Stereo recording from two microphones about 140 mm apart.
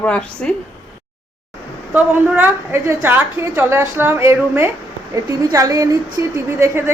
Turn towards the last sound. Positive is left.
turn(degrees=-15)  # may be behind; listen again after turning